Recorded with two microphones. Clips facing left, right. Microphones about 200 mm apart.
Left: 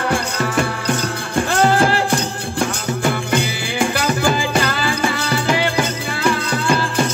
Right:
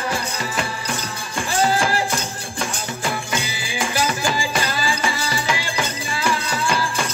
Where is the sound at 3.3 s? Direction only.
60° left (ahead or behind).